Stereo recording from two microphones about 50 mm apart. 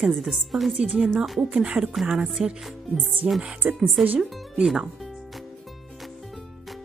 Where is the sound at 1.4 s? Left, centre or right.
Centre.